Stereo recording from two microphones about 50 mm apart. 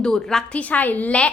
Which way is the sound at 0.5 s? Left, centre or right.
Left.